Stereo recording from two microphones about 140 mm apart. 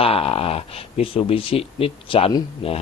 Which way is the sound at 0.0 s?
45° left (ahead or behind).